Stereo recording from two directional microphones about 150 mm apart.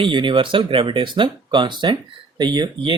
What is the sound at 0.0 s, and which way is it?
Speech, 35° right (ahead or behind).